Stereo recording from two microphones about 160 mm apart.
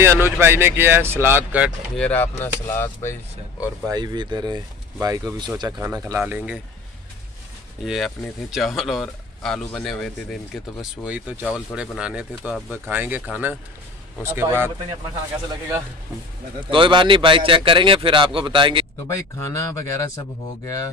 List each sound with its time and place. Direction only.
0.0 s speech: 15° right (ahead or behind)
2.0 s speech: 10° left (ahead or behind)
3.9 s speech: 25° right (ahead or behind); by 6.6 s 10° right (ahead or behind)
7.8 s speech: centre (ahead or behind)
16.5 s a man's voice: 30° right (ahead or behind)
19.0 s speech: 20° left (ahead or behind)